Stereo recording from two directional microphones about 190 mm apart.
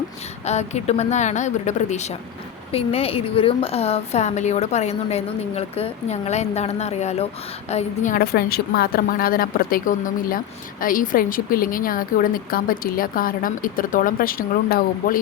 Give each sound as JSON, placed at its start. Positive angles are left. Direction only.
{"t": 0.4, "sound": "a woman's voice", "side_deg": 35}